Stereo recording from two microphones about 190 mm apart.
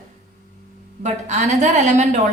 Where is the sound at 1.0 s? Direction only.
40° right (ahead or behind).